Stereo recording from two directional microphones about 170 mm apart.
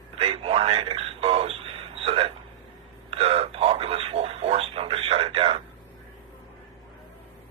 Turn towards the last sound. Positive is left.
turn(degrees=-35)  # may be behind; listen again after turning